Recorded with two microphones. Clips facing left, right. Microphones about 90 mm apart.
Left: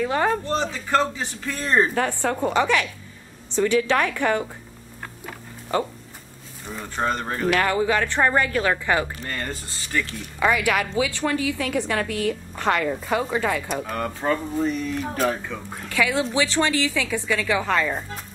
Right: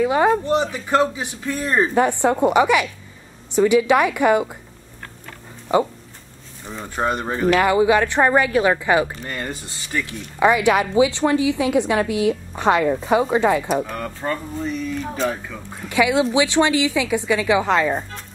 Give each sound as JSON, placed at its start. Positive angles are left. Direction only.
{"t": 0.0, "sound": "speech", "side_deg": -10}
{"t": 2.0, "sound": "speech", "side_deg": -20}
{"t": 5.7, "sound": "speech", "side_deg": -15}
{"t": 13.8, "sound": "speech", "side_deg": 0}
{"t": 15.9, "sound": "speech", "side_deg": -15}